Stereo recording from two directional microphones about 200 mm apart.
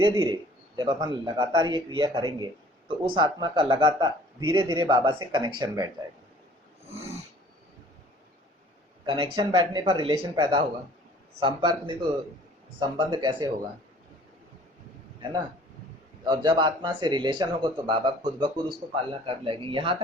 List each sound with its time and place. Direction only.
0.1 s a man's voice: 25° right (ahead or behind)
9.0 s a man's voice: 25° right (ahead or behind)
16.2 s a man's voice: 20° right (ahead or behind)